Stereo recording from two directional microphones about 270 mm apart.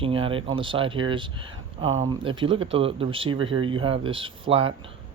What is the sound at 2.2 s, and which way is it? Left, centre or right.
Speech, centre.